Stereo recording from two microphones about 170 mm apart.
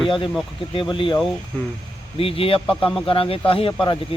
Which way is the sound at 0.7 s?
30° left (ahead or behind).